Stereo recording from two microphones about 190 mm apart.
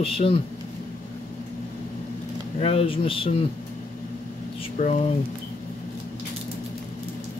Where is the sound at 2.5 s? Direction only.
35° left (ahead or behind).